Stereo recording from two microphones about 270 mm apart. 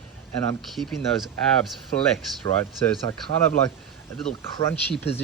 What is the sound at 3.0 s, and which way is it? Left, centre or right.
Speech, centre.